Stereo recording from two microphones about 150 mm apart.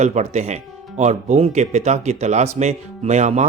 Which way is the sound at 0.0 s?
50° right (ahead or behind).